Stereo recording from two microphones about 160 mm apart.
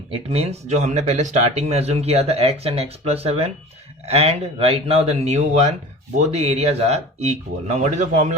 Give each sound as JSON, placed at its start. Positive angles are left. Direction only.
{"t": 0.1, "sound": "speech", "side_deg": -40}